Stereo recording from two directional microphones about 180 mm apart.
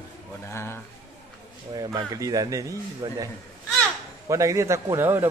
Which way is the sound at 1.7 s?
20° right (ahead or behind).